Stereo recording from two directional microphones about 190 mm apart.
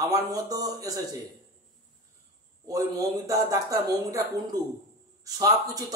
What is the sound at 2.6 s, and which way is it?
A man's voice, 20° right (ahead or behind).